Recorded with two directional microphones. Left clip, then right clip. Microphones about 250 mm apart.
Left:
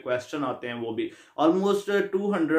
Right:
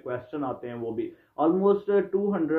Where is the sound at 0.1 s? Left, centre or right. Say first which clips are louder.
Left 4 dB; centre.